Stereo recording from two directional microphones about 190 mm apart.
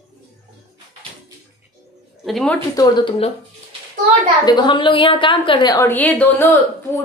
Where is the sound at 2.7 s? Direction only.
20° left (ahead or behind).